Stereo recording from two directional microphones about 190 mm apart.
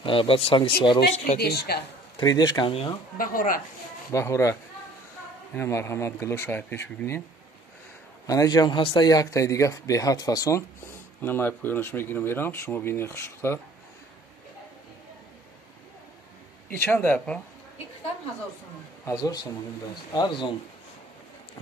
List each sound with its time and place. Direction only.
0.0 s speech: 25° left (ahead or behind)
1.4 s a woman's voice: 60° left (ahead or behind)
2.1 s speech: 20° left (ahead or behind)
3.2 s speech: 45° left (ahead or behind)
4.1 s speech: 15° left (ahead or behind)
8.3 s speech: 20° left (ahead or behind)
16.7 s speech: 10° left (ahead or behind)
19.0 s speech: 20° left (ahead or behind)